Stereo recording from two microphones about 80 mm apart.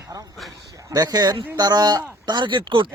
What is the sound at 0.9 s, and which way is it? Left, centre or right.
Speech, right.